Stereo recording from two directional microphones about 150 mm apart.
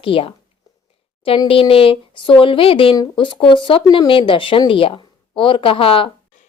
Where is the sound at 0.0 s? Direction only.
35° left (ahead or behind).